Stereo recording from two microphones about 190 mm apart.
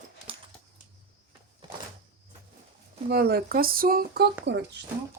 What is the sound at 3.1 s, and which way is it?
Speech, 55° right (ahead or behind).